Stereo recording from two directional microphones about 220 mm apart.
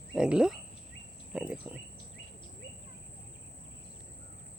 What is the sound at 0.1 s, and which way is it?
Speech, 5° right (ahead or behind).